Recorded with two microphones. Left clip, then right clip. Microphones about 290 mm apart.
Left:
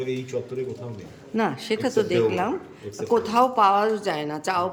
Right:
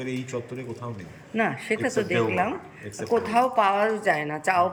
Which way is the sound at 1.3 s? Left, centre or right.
Centre.